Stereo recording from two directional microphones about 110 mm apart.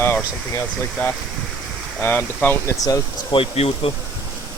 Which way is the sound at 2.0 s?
15° left (ahead or behind).